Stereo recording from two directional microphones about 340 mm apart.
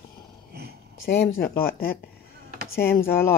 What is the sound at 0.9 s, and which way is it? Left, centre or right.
Speech, left.